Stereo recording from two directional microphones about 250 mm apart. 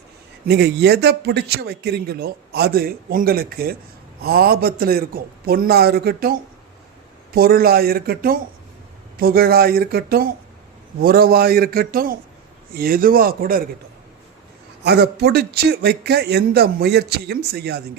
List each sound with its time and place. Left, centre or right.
0.4 s speech: right
14.8 s speech: right